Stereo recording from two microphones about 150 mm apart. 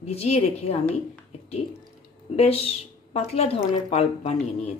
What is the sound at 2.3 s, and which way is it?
Speech, 40° left (ahead or behind).